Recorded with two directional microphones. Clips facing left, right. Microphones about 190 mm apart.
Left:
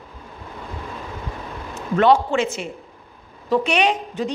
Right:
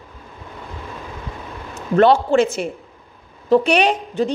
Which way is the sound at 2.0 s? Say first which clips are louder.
Right 3 dB; 35° right (ahead or behind).